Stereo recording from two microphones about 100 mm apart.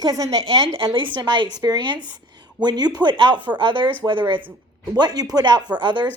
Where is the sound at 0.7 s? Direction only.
55° right (ahead or behind).